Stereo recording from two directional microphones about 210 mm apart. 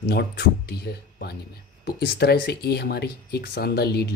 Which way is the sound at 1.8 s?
50° left (ahead or behind).